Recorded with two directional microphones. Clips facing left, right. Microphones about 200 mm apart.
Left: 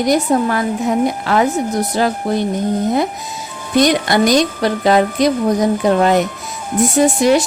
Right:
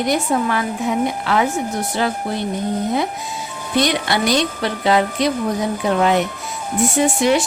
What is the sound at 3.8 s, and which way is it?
Speech, 45° left (ahead or behind).